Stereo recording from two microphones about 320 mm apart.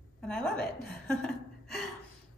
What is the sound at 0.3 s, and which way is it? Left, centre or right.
A woman's voice, centre.